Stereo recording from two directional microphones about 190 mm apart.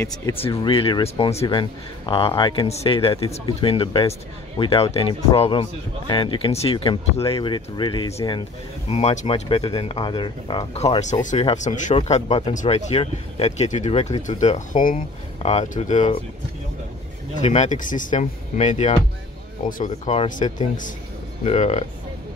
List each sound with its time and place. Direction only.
0.0 s speech: 10° left (ahead or behind)
0.5 s speech: 25° left (ahead or behind)
8.9 s speech: 35° left (ahead or behind)
17.4 s a man's voice: 35° left (ahead or behind)